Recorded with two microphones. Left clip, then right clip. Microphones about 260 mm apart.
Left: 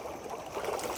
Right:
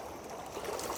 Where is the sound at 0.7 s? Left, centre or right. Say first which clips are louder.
Left 2 dB; centre.